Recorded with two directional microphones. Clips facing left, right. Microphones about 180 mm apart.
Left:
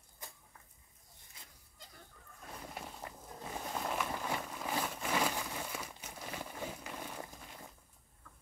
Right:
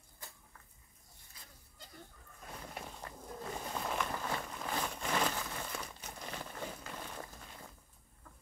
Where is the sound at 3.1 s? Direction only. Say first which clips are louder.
Right 3 dB; 15° left (ahead or behind).